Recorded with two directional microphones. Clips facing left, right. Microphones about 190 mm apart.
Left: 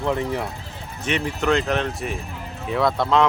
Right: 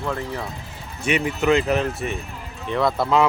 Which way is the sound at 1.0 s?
10° right (ahead or behind).